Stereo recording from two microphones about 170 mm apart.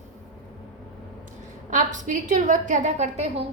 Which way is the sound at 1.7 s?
50° right (ahead or behind).